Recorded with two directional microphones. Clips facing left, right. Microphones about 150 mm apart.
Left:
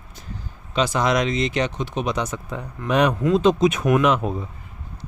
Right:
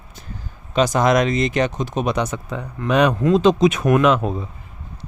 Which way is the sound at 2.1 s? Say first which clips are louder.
Right 3 dB; 65° right (ahead or behind).